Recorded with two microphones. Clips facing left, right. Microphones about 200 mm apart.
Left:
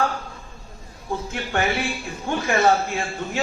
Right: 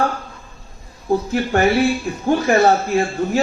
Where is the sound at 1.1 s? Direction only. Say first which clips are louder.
Right 8 dB; 40° right (ahead or behind).